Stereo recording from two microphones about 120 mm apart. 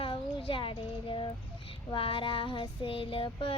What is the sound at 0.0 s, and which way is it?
Child singing, 45° left (ahead or behind).